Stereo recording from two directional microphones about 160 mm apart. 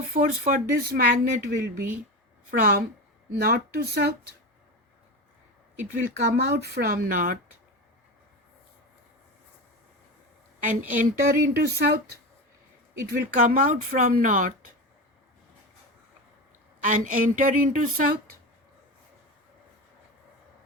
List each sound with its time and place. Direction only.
0.1 s speech: 55° right (ahead or behind); by 1.8 s 75° right (ahead or behind)
2.5 s speech: 60° right (ahead or behind)
3.3 s speech: 75° right (ahead or behind)
6.3 s speech: 80° right; by 7.3 s 60° right (ahead or behind)
10.7 s a woman's voice: 55° right (ahead or behind)
11.3 s speech: 70° right (ahead or behind)
16.8 s speech: 55° right (ahead or behind)